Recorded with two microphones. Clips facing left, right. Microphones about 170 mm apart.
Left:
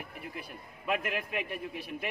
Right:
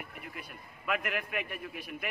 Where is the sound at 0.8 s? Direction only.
25° left (ahead or behind).